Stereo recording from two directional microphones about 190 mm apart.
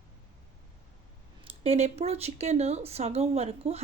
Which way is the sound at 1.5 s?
30° right (ahead or behind).